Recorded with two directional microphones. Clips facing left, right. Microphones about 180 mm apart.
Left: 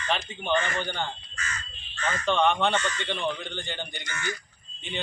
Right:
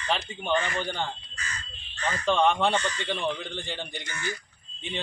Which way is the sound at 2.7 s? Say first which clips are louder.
Even; 35° right (ahead or behind).